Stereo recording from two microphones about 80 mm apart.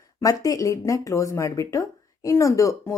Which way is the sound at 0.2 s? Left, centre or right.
Left.